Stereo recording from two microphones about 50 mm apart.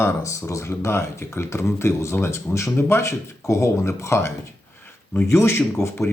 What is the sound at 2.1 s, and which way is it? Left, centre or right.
Speech, left.